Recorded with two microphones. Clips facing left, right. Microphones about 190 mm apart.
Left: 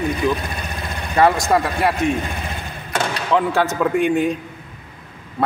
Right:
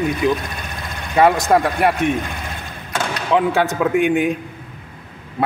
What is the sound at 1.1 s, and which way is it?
Speech, 15° right (ahead or behind).